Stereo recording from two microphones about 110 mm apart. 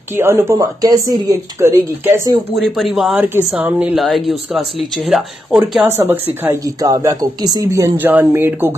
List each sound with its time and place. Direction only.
0.1 s speech: 20° right (ahead or behind)
2.6 s speech: centre (ahead or behind)
4.0 s speech: centre (ahead or behind)
5.9 s speech: 20° right (ahead or behind)
6.6 s speech: 35° right (ahead or behind)
8.0 s speech: 20° right (ahead or behind)